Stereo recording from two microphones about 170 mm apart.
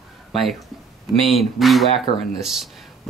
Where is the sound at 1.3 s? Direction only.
Centre (ahead or behind).